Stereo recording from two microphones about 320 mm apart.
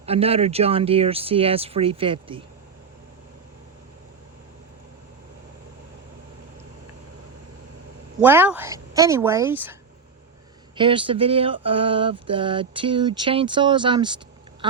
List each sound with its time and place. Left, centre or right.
0.0 s speech: centre
8.2 s speech: centre
10.8 s speech: centre